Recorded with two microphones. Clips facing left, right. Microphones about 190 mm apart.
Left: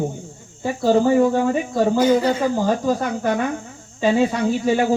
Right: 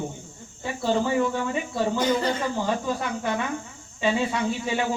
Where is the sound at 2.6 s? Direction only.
40° left (ahead or behind).